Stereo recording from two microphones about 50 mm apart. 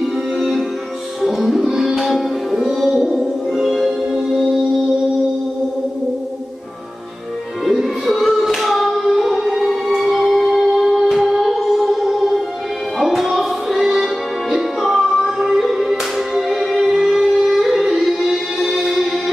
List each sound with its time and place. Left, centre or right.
0.4 s music: centre
1.7 s music: centre
7.6 s music: centre
13.7 s music: centre
14.0 s music: centre